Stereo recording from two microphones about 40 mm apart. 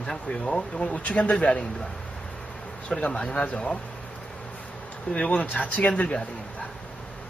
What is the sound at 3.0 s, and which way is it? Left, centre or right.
Speech, left.